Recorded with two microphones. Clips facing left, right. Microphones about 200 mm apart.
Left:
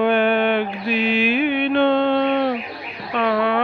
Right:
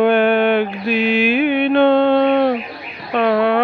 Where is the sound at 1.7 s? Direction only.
45° right (ahead or behind).